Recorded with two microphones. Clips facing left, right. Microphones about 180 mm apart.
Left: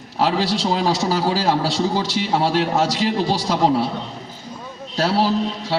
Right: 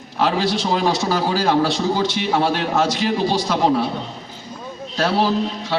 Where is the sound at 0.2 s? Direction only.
35° left (ahead or behind).